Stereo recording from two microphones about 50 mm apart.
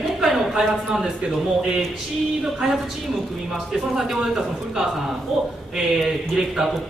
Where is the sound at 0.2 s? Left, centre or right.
Centre.